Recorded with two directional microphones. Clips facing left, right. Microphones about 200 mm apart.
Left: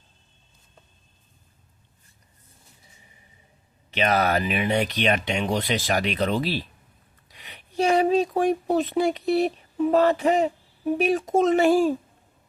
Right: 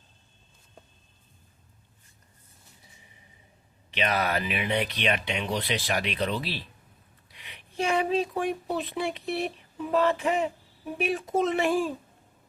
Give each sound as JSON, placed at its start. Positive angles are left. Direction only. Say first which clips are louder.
{"t": 3.9, "sound": "speech", "louder": "left 5 dB", "side_deg": 45}
{"t": 7.3, "sound": "a sound", "louder": "left 3 dB", "side_deg": 40}
{"t": 10.9, "sound": "speech", "louder": "left 5 dB", "side_deg": 40}